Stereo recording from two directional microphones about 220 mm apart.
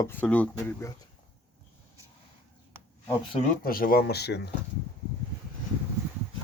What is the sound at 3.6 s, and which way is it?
Speech, 40° left (ahead or behind).